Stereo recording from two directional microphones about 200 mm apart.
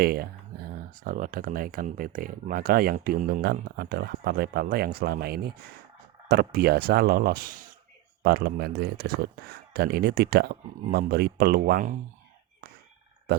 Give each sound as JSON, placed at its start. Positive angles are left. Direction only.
{"t": 0.0, "sound": "speech", "side_deg": -50}